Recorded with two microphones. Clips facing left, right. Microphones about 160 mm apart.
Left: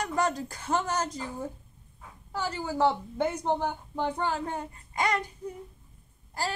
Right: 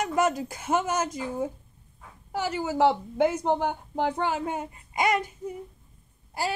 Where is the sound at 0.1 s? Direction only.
10° right (ahead or behind).